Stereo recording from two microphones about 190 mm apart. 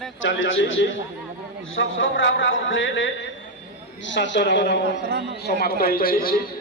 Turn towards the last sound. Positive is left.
turn(degrees=50)  # may be behind; listen again after turning